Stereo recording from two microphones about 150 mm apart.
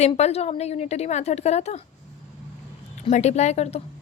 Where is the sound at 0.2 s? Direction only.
45° left (ahead or behind).